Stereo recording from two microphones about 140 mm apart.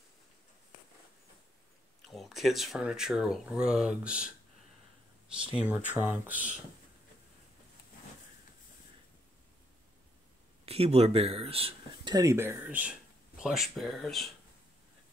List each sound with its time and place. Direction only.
2.0 s speech: centre (ahead or behind)
5.5 s speech: 10° right (ahead or behind)
10.6 s speech: 45° right (ahead or behind)
12.1 s speech: 25° right (ahead or behind); by 14.3 s centre (ahead or behind)